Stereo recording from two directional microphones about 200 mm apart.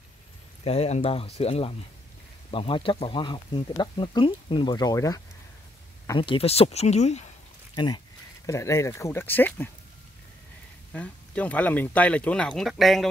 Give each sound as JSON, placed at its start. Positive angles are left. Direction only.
{"t": 0.7, "sound": "speech", "side_deg": 30}
{"t": 7.7, "sound": "speech", "side_deg": 25}
{"t": 10.9, "sound": "speech", "side_deg": 5}